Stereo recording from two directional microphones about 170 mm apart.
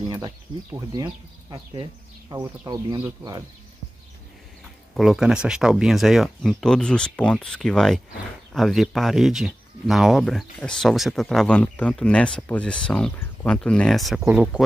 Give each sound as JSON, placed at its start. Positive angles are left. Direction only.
{"t": 0.7, "sound": "speech", "side_deg": -20}
{"t": 4.9, "sound": "speech", "side_deg": 0}